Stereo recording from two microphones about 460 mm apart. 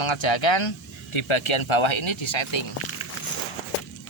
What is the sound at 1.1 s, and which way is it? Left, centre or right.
Speech, left.